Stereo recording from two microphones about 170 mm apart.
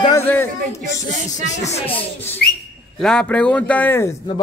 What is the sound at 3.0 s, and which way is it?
Speech, 5° left (ahead or behind).